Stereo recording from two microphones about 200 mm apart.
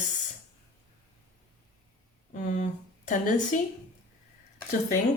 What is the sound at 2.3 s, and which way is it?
Speech, 40° left (ahead or behind).